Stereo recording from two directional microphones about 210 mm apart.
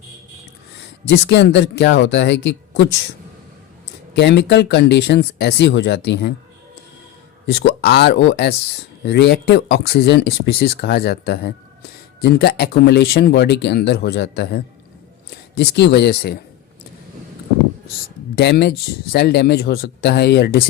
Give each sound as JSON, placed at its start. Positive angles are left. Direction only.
{"t": 1.0, "sound": "speech", "side_deg": 55}
{"t": 4.1, "sound": "speech", "side_deg": 55}
{"t": 7.4, "sound": "speech", "side_deg": 55}
{"t": 18.3, "sound": "speech", "side_deg": 50}